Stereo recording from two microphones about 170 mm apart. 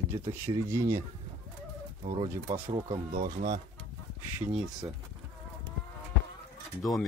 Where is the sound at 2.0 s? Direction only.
40° right (ahead or behind).